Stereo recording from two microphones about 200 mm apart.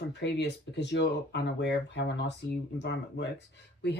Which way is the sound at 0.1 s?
60° left (ahead or behind).